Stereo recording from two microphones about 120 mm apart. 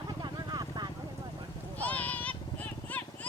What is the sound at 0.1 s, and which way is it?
Vehicle, 35° right (ahead or behind).